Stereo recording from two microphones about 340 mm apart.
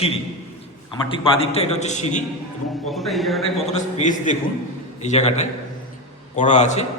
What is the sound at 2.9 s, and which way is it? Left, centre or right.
Speech, centre.